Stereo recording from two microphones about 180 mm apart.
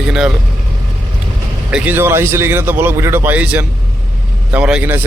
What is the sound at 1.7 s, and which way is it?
Speech, 10° right (ahead or behind).